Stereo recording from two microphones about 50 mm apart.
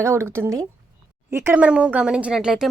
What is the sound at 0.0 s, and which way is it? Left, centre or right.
Speech, right.